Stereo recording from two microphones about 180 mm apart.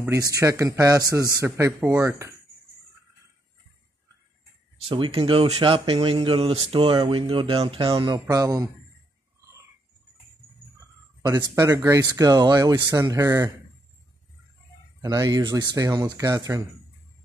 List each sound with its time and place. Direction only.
0.0 s a man's voice: 15° right (ahead or behind)
4.8 s speech: 30° right (ahead or behind)
7.9 s speech: 20° right (ahead or behind)
11.2 s speech: 20° right (ahead or behind)
15.0 s speech: 20° right (ahead or behind)